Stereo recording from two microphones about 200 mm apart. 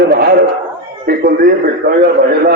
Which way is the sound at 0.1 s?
55° right (ahead or behind).